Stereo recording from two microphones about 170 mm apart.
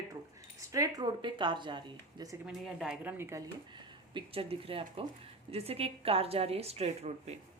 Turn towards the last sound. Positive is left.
turn(degrees=-40)  # may be behind; listen again after turning